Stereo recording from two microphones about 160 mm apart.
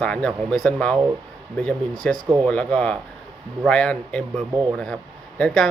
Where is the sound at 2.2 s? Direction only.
25° right (ahead or behind).